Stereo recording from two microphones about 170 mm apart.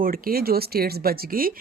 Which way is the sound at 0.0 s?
60° right (ahead or behind).